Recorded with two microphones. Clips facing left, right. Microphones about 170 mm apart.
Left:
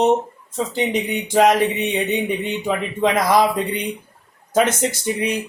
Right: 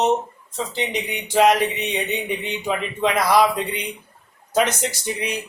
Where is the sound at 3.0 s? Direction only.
45° left (ahead or behind).